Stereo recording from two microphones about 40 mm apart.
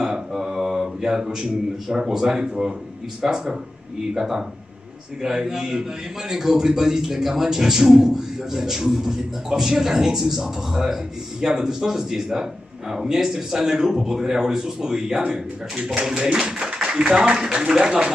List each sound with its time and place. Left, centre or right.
0.0 s a man's voice: centre